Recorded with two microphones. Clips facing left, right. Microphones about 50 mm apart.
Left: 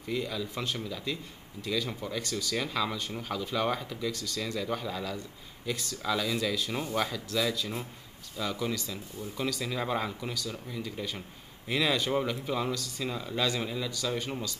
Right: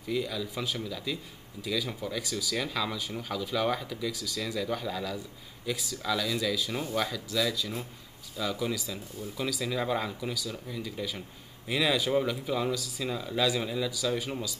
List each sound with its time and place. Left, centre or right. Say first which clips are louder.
0.0 s speech: right 1 dB; centre
4.1 s speech: even; centre
6.0 s speech: even; centre
6.5 s speech: even; centre